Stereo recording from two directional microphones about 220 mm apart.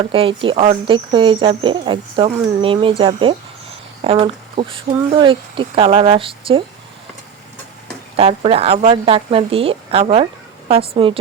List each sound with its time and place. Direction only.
0.0 s speech: 25° right (ahead or behind)
8.1 s speech: 30° right (ahead or behind)